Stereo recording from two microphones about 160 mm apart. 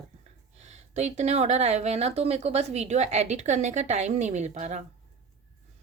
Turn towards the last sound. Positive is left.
turn(degrees=-45)  # may be behind; listen again after turning